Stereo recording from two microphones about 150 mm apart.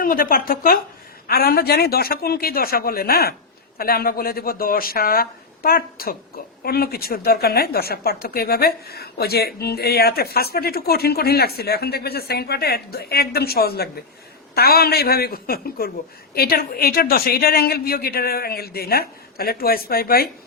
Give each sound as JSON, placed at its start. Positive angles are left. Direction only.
{"t": 0.0, "sound": "a woman's voice", "side_deg": 75}
{"t": 1.3, "sound": "speech", "side_deg": 90}